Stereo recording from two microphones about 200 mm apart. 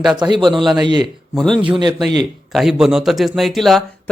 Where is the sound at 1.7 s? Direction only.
20° right (ahead or behind).